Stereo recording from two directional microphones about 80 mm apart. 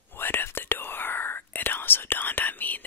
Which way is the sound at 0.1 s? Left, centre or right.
Left.